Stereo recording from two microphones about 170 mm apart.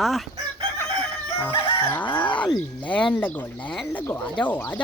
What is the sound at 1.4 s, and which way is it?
Speech, 10° left (ahead or behind).